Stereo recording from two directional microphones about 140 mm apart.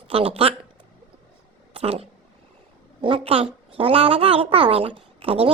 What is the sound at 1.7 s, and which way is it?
A woman's voice, 45° right (ahead or behind).